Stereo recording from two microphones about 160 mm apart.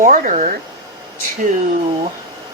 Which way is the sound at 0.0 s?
55° right (ahead or behind).